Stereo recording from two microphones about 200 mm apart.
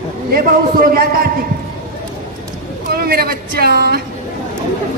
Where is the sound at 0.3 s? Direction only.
50° right (ahead or behind).